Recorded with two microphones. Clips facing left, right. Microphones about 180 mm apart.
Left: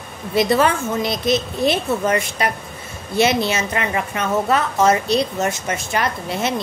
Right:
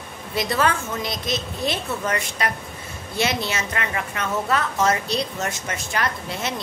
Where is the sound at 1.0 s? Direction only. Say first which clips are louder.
Left 11 dB; 60° left (ahead or behind).